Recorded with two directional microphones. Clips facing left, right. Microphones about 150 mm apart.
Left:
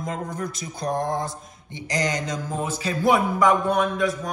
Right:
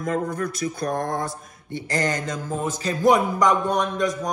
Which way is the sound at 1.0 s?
55° right (ahead or behind).